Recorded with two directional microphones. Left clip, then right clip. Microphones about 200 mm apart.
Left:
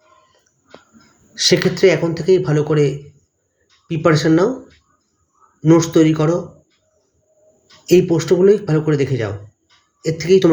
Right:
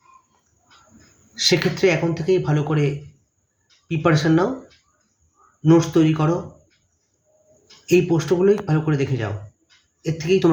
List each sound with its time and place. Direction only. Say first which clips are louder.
1.3 s speech: left 4 dB; 15° left (ahead or behind)
5.6 s speech: left 4 dB; 15° left (ahead or behind)
7.9 s speech: left 5 dB; 15° left (ahead or behind)